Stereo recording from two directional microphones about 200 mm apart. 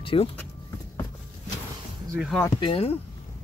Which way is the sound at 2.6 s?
30° left (ahead or behind).